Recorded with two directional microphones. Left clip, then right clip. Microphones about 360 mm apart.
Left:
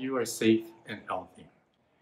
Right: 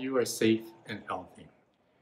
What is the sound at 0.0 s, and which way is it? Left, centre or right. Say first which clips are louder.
Speech: even; centre.